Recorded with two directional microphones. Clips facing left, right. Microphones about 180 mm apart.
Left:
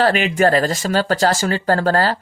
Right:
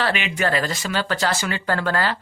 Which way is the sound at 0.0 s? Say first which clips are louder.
Left 8 dB; 40° left (ahead or behind).